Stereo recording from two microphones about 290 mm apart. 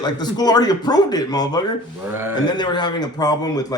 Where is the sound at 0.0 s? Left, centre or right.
Centre.